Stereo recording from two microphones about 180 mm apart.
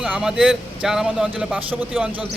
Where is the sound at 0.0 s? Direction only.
5° right (ahead or behind).